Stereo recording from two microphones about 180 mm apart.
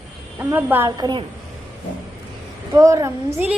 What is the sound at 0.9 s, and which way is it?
Speech, 20° right (ahead or behind).